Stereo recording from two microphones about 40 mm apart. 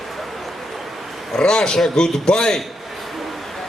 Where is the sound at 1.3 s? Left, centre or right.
Centre.